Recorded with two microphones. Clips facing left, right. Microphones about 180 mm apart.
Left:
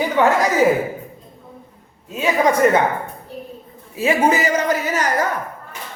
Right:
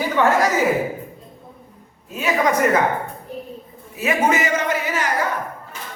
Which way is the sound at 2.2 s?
30° left (ahead or behind).